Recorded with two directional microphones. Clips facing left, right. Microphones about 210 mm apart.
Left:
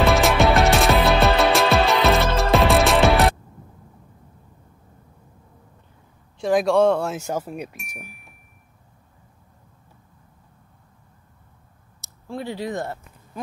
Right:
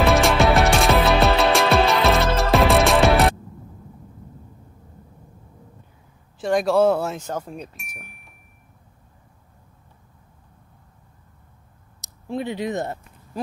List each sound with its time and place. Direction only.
0.0 s music: centre (ahead or behind)
6.4 s a man's voice: centre (ahead or behind)
7.2 s a man's voice: 10° left (ahead or behind)
12.0 s speech: 20° right (ahead or behind)